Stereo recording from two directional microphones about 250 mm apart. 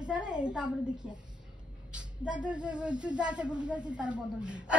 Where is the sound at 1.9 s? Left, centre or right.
Centre.